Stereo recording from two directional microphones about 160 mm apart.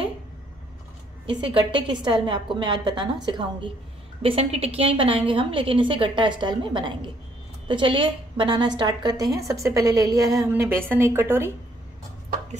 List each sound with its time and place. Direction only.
1.2 s a woman's voice: 30° right (ahead or behind); by 11.5 s 15° right (ahead or behind)